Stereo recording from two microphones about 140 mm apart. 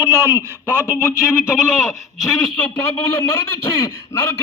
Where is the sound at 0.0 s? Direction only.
20° right (ahead or behind).